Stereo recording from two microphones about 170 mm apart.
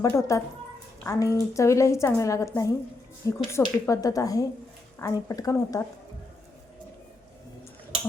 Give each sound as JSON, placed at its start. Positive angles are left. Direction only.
{"t": 0.0, "sound": "a woman's voice", "side_deg": 15}